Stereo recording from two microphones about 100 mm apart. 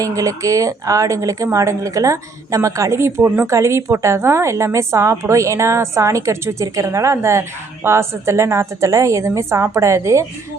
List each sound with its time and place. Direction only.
0.0 s a woman's voice: 35° right (ahead or behind)